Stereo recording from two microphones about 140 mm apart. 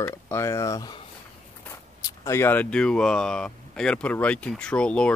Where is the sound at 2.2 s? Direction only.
20° left (ahead or behind).